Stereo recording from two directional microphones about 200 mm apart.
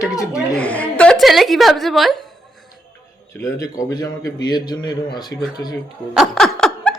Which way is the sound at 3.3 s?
15° left (ahead or behind).